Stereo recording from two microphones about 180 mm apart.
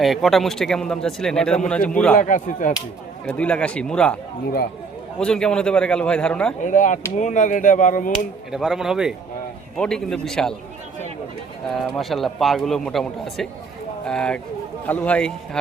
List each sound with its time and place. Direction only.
0.0 s speech: centre (ahead or behind)
2.1 s speech: 45° left (ahead or behind)
3.2 s speech: 5° left (ahead or behind)
5.2 s speech: 5° left (ahead or behind)
6.6 s speech: 45° left (ahead or behind)
8.5 s speech: 5° right (ahead or behind)
11.7 s speech: centre (ahead or behind)